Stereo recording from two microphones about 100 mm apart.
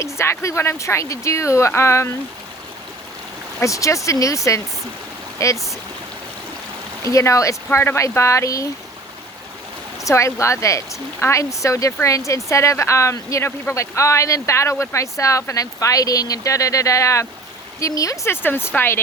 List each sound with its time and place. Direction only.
0.0 s speech: 30° left (ahead or behind)
3.6 s speech: 35° left (ahead or behind)
7.0 s speech: 30° left (ahead or behind)
10.0 s speech: 30° left (ahead or behind)